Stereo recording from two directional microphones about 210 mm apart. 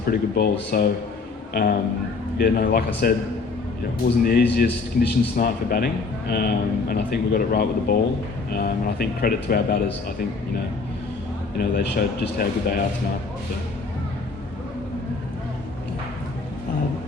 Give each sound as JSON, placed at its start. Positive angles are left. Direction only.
{"t": 0.0, "sound": "a man's voice", "side_deg": 45}
{"t": 4.2, "sound": "a man's voice", "side_deg": 45}
{"t": 11.7, "sound": "a man's voice", "side_deg": 45}